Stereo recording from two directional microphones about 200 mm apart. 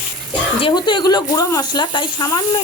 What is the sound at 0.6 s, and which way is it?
Speech, 25° left (ahead or behind).